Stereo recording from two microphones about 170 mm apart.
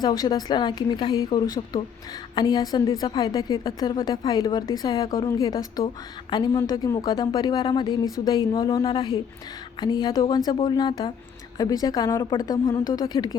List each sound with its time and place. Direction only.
0.2 s a woman's voice: 25° left (ahead or behind)